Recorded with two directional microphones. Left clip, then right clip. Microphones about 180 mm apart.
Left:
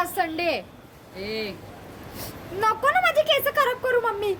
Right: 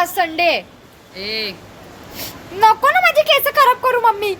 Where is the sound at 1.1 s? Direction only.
20° left (ahead or behind).